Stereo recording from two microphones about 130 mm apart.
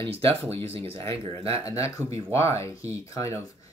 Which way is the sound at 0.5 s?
50° right (ahead or behind).